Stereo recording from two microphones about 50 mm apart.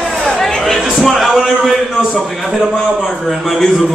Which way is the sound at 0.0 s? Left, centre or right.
Centre.